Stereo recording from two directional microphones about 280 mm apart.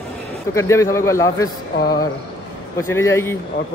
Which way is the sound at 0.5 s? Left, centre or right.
Centre.